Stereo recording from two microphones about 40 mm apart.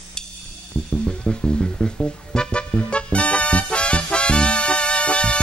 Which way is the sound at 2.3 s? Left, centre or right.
Left.